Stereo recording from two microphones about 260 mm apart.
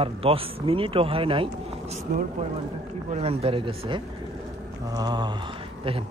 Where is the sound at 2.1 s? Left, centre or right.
Right; by 5.3 s centre.